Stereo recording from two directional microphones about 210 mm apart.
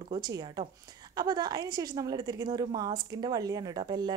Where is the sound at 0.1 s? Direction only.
20° right (ahead or behind).